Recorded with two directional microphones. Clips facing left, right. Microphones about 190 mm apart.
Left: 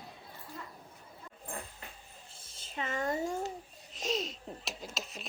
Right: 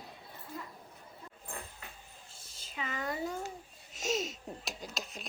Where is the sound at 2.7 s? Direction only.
45° left (ahead or behind).